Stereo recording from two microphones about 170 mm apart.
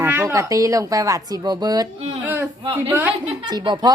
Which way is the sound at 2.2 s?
15° right (ahead or behind).